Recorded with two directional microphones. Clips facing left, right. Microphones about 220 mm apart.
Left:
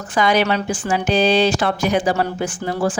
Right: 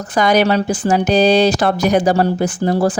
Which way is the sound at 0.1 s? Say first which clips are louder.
Right 4 dB; 40° right (ahead or behind).